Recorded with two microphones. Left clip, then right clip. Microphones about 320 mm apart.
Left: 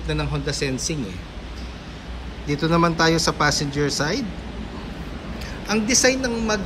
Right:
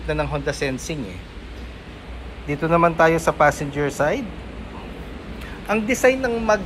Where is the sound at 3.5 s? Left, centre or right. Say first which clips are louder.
Left 4 dB; left.